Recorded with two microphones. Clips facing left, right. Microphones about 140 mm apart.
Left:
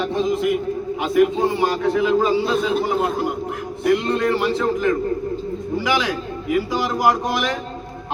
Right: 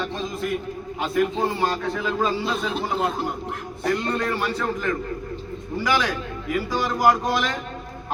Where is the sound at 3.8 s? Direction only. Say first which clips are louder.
Left 6 dB; 20° left (ahead or behind).